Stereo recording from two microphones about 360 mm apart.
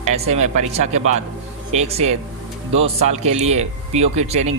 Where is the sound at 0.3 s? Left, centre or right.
Centre.